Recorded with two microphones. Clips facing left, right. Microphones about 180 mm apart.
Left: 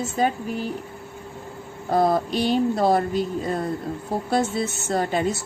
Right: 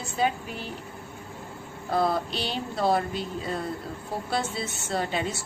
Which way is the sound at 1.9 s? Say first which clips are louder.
Left 5 dB; 45° left (ahead or behind).